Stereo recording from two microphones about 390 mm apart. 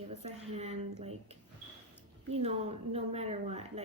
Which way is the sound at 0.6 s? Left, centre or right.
Centre.